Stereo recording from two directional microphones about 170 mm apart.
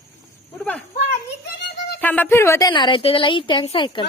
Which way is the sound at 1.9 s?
10° left (ahead or behind).